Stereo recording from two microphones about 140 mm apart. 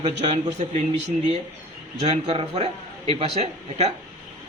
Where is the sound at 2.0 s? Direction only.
50° right (ahead or behind).